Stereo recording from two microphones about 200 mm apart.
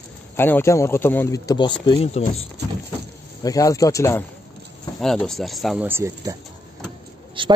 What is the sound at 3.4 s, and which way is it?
Speech, 15° left (ahead or behind).